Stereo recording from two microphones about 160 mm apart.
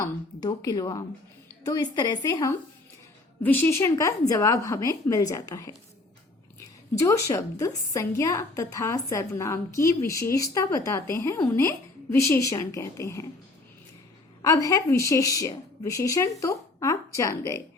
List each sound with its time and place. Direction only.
0.0 s a woman's voice: 25° left (ahead or behind)
14.4 s a woman's voice: 20° left (ahead or behind)